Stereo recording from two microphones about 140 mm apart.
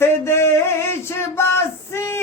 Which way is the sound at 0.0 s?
20° left (ahead or behind).